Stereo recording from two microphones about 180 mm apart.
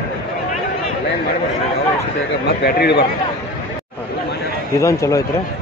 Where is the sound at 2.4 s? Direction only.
65° left (ahead or behind).